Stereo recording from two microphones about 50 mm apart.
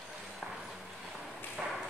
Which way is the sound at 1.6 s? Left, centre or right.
Centre.